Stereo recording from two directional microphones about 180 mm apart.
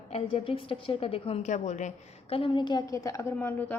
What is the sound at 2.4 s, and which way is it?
A woman's voice, 25° left (ahead or behind).